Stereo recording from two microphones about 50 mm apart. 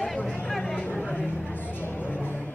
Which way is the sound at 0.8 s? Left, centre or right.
Left.